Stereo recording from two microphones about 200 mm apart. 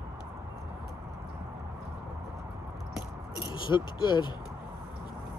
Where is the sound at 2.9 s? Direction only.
20° left (ahead or behind).